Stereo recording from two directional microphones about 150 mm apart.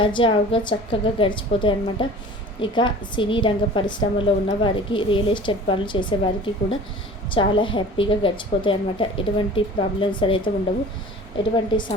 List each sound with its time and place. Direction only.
0.0 s a woman's voice: 35° left (ahead or behind)